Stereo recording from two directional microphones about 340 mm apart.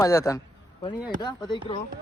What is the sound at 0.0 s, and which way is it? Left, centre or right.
A man's voice, centre.